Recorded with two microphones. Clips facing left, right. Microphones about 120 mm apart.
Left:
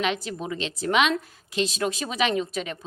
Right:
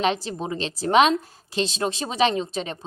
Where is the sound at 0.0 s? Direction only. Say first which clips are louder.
Right 3 dB; 35° right (ahead or behind).